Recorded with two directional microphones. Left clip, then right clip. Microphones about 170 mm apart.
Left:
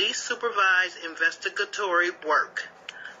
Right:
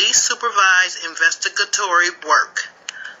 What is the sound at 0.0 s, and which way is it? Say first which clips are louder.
Speech: right 9 dB; 35° right (ahead or behind).